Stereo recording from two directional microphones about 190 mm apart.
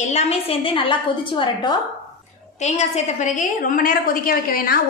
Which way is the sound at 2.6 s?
40° left (ahead or behind).